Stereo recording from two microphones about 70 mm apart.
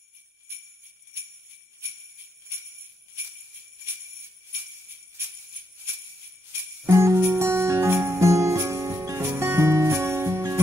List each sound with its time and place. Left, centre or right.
1.8 s jingle bell: right
6.9 s jingle bell: right
9.3 s music: right